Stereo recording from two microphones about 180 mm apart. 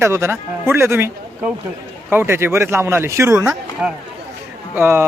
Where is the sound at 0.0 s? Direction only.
15° right (ahead or behind).